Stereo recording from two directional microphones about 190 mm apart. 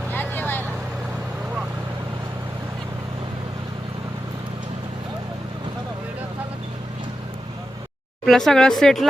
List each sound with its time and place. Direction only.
0.1 s vehicle: 10° left (ahead or behind)
8.2 s speech: centre (ahead or behind)